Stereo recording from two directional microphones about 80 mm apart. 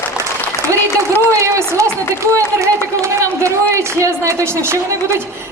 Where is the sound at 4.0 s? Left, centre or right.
Right.